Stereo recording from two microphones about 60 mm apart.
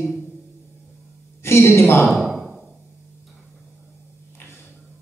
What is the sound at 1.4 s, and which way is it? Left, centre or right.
Speech, left.